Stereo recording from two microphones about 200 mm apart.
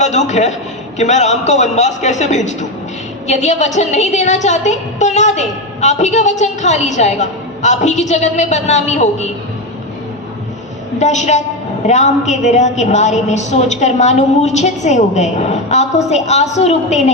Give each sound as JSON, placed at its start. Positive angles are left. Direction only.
{"t": 0.0, "sound": "a woman's voice", "side_deg": 35}
{"t": 10.9, "sound": "a woman's voice", "side_deg": 35}